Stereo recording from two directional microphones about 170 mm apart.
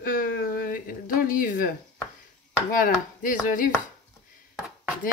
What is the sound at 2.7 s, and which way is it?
Speech, 55° left (ahead or behind).